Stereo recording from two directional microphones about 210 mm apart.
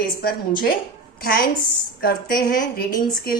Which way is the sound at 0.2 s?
45° left (ahead or behind).